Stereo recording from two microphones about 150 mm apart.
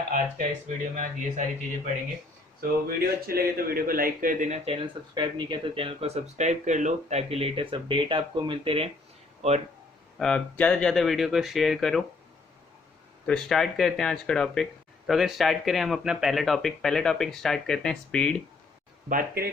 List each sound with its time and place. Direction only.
0.9 s speech: 55° right (ahead or behind)
2.6 s a man's voice: 85° right; by 8.9 s 40° right (ahead or behind)
9.4 s a man's voice: 50° right (ahead or behind)
10.2 s speech: 5° left (ahead or behind)
13.2 s speech: 5° left (ahead or behind)
19.0 s speech: 75° right (ahead or behind)